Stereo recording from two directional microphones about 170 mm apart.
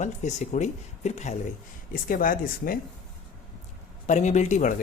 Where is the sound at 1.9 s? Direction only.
55° left (ahead or behind).